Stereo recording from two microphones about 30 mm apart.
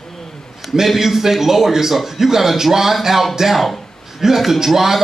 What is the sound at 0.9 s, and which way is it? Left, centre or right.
Speech, centre.